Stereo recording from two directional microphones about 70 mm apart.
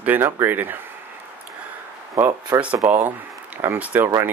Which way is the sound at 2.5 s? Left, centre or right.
Right.